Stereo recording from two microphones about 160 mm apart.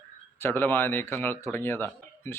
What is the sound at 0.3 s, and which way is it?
Speech, 15° left (ahead or behind).